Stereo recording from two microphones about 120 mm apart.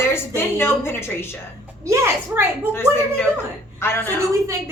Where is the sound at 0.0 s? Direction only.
20° left (ahead or behind).